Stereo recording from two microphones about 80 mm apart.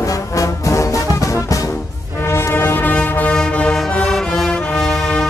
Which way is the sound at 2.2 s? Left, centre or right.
Left.